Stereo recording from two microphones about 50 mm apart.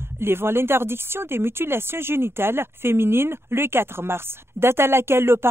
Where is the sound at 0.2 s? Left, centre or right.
Right.